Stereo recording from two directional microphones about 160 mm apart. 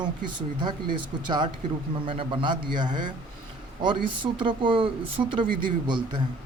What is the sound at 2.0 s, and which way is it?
Speech, 30° right (ahead or behind).